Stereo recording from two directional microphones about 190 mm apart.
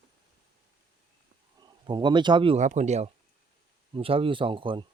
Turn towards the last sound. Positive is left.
turn(degrees=-25)  # may be behind; listen again after turning